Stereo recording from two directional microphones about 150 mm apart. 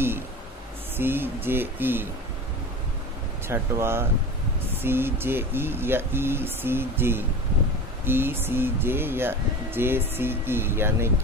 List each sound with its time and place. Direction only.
0.9 s speech: 15° right (ahead or behind)
3.4 s speech: 15° right (ahead or behind)